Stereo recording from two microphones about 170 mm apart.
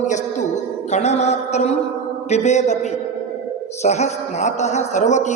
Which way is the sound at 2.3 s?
40° left (ahead or behind).